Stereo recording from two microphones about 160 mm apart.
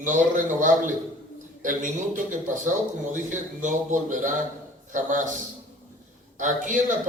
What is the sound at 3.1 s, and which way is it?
A man's voice, 50° right (ahead or behind).